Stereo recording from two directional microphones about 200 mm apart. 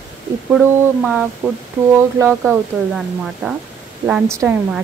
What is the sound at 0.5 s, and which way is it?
A woman's voice, 5° right (ahead or behind).